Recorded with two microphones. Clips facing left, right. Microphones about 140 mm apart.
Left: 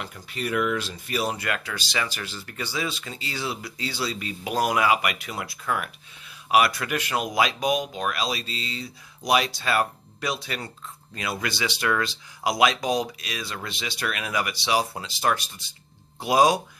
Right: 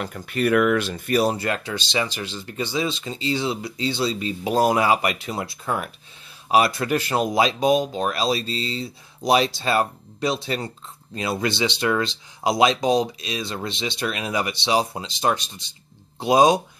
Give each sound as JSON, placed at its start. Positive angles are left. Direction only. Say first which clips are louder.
{"t": 0.0, "sound": "speech", "louder": "right 9 dB", "side_deg": -55}
{"t": 1.2, "sound": "speech", "louder": "right 6 dB", "side_deg": -30}